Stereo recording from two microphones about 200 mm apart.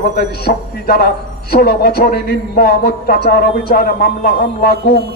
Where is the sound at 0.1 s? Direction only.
50° left (ahead or behind).